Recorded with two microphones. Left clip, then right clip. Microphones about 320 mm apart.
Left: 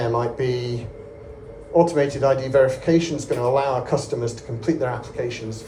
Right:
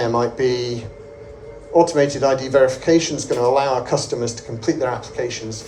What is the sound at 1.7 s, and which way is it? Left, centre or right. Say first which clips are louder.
Speech: right 3 dB; right.